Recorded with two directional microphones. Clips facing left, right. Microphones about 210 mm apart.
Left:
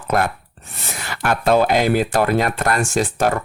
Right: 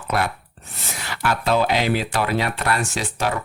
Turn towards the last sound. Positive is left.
turn(degrees=50)  # may be behind; listen again after turning